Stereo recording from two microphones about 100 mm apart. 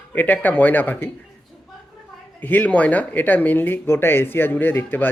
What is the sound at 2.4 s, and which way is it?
Speech, 15° left (ahead or behind).